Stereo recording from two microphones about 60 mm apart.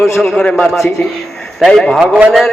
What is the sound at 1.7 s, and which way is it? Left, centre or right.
Speech, centre.